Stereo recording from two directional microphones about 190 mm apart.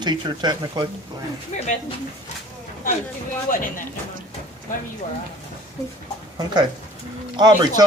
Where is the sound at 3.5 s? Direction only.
45° left (ahead or behind).